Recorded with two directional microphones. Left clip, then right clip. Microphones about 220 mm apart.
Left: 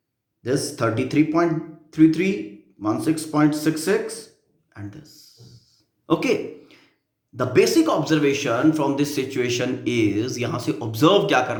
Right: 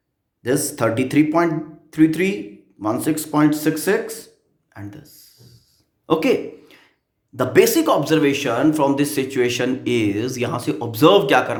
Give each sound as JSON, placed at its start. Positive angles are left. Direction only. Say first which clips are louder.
{"t": 0.4, "sound": "speech", "louder": "right 3 dB", "side_deg": -30}
{"t": 4.7, "sound": "a sound", "louder": "right 2 dB", "side_deg": -25}
{"t": 7.3, "sound": "speech", "louder": "right 2 dB", "side_deg": -30}